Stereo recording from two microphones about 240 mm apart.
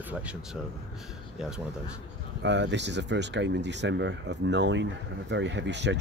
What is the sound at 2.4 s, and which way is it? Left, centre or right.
Speech, right.